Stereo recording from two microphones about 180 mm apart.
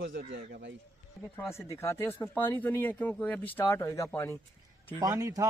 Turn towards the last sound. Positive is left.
turn(degrees=-20)  # may be behind; listen again after turning